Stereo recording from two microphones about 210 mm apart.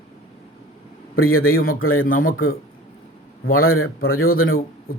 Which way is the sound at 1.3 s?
80° left.